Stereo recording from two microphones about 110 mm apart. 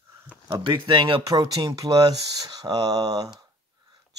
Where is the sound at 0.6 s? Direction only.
45° right (ahead or behind).